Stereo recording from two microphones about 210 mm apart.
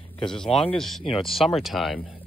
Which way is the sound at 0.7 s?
Centre (ahead or behind).